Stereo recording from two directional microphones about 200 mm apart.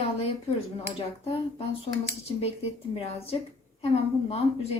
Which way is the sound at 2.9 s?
30° left (ahead or behind).